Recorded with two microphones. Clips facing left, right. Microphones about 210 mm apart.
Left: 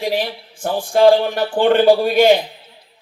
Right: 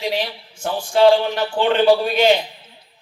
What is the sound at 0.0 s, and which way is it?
Speech, 55° left (ahead or behind).